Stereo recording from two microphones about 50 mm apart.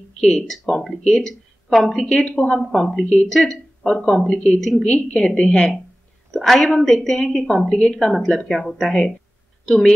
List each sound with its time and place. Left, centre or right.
0.2 s speech: centre
0.7 s speech: centre
0.9 s a woman's voice: centre
2.6 s a woman's voice: centre
7.8 s a woman's voice: centre